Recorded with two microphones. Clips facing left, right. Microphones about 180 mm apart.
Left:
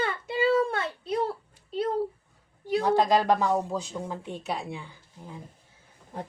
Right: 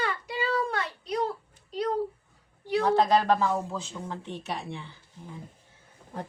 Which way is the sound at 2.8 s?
10° left (ahead or behind).